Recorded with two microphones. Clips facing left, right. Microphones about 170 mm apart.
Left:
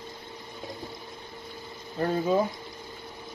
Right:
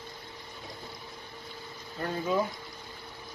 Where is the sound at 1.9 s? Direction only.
35° left (ahead or behind).